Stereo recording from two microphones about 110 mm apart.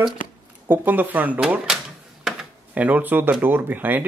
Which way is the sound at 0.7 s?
15° right (ahead or behind).